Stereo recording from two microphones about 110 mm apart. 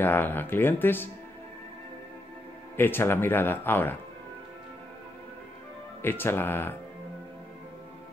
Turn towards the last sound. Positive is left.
turn(degrees=20)  # may be behind; listen again after turning